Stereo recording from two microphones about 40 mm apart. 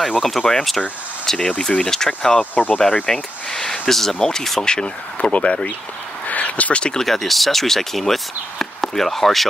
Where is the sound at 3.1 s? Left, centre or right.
Centre.